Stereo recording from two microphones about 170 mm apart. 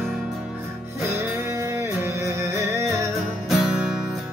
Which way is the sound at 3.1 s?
Centre (ahead or behind).